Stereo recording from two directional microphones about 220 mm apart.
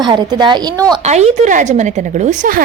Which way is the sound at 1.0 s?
30° right (ahead or behind).